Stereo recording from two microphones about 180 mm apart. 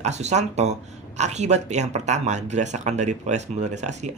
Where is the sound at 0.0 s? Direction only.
40° right (ahead or behind).